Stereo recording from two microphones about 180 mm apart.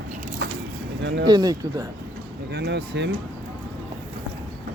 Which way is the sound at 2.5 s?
70° right (ahead or behind).